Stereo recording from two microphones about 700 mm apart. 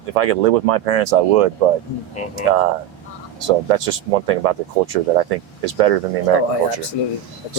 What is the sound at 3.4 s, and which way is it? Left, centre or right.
Speech, right.